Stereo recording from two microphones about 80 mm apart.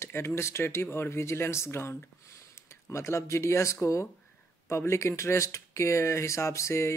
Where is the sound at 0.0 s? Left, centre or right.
Left.